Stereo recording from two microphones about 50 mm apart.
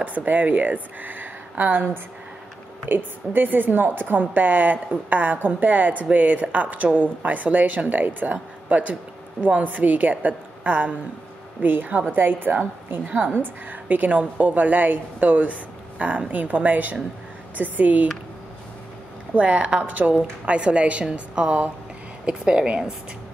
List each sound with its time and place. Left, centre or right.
0.0 s a woman's voice: right
2.9 s a woman's voice: right
19.3 s a woman's voice: right
20.2 s a woman's voice: right